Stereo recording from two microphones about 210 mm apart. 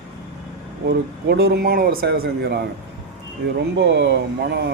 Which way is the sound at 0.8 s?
50° right (ahead or behind).